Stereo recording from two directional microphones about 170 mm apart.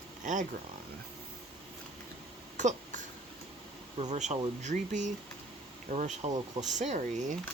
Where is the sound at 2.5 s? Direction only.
45° right (ahead or behind).